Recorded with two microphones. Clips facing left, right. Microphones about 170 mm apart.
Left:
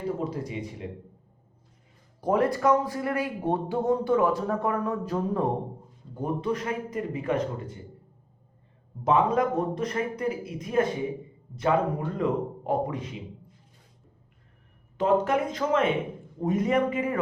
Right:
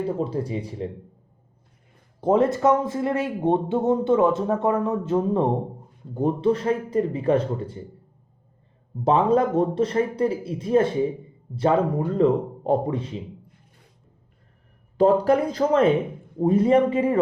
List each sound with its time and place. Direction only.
0.3 s speech: 30° right (ahead or behind)
2.2 s speech: 25° right (ahead or behind)
9.0 s speech: 30° right (ahead or behind)
14.9 s speech: 35° right (ahead or behind)